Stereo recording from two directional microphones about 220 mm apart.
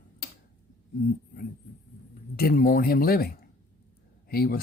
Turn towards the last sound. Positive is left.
turn(degrees=45)  # may be behind; listen again after turning